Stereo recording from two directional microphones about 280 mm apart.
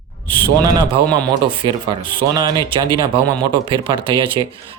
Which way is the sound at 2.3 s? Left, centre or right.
Centre.